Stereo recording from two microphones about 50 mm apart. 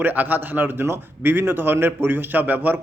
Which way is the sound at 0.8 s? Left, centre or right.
Right.